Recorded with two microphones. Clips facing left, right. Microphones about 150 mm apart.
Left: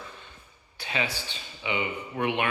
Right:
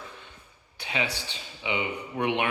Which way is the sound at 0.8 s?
15° right (ahead or behind).